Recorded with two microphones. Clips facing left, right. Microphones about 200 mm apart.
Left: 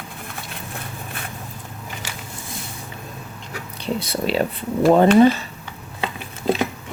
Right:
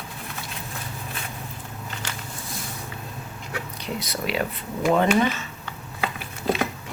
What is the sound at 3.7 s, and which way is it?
Speech, 30° left (ahead or behind).